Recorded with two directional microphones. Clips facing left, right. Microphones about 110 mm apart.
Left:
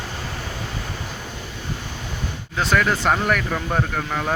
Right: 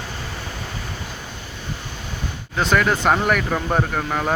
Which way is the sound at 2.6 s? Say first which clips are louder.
Right 1 dB; centre (ahead or behind).